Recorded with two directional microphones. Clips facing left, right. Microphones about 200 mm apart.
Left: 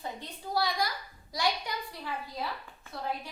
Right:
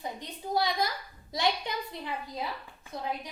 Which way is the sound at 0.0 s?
20° right (ahead or behind).